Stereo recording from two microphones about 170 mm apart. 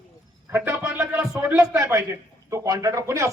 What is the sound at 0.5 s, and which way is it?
A man's voice, 15° right (ahead or behind).